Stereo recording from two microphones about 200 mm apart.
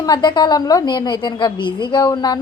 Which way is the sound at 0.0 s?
20° left (ahead or behind).